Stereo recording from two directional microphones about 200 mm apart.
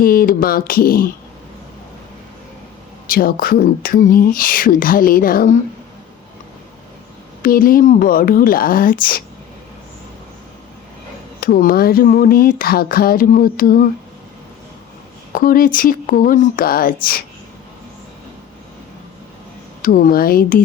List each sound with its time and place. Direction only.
0.0 s speech: 45° left (ahead or behind)
3.1 s speech: 45° left (ahead or behind)
7.4 s speech: 45° left (ahead or behind)
11.3 s speech: 50° left (ahead or behind)
15.4 s speech: 45° left (ahead or behind)
19.8 s speech: 45° left (ahead or behind)